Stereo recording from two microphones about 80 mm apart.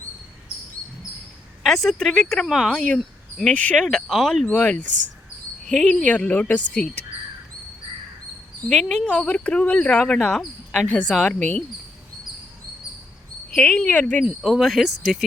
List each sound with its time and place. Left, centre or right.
1.6 s speech: centre
3.4 s speech: centre
4.4 s speech: centre
5.6 s speech: centre
8.7 s speech: centre
13.6 s speech: centre
14.4 s speech: centre